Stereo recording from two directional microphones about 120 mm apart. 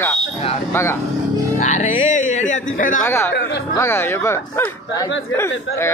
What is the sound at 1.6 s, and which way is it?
Music, 90° left.